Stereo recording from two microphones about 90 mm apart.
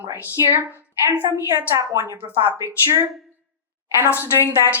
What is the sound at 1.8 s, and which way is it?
Speech, 40° right (ahead or behind).